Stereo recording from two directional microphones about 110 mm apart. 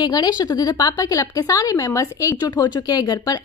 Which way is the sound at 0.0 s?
35° left (ahead or behind).